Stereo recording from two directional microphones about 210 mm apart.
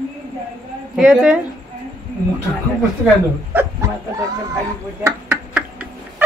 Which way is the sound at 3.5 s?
10° right (ahead or behind).